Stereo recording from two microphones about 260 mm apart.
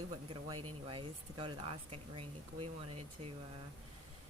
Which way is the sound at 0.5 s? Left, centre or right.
Right.